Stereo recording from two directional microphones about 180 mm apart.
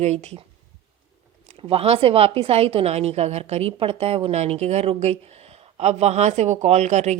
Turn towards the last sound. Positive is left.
turn(degrees=-40)  # may be behind; listen again after turning